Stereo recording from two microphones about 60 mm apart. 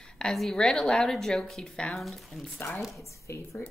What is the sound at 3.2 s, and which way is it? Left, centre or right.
Speech, left.